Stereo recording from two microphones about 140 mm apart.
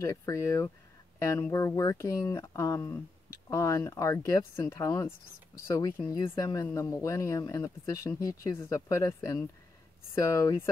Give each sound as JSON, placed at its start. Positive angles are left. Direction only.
{"t": 0.0, "sound": "speech", "side_deg": 25}